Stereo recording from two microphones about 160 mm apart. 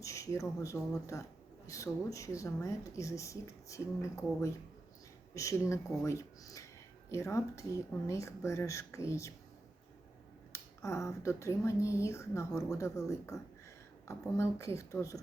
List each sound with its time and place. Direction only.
0.0 s speech: 20° left (ahead or behind)
10.5 s speech: 20° left (ahead or behind)